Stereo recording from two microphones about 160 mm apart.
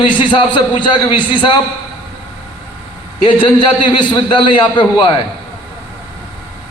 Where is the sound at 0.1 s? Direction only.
30° left (ahead or behind).